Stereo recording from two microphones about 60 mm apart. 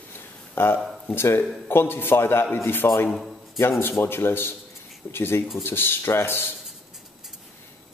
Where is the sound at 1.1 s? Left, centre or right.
Left.